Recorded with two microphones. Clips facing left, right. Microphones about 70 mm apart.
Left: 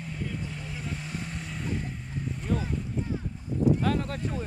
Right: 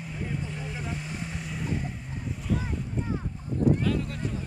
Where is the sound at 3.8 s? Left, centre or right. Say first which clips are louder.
Left 1 dB; left.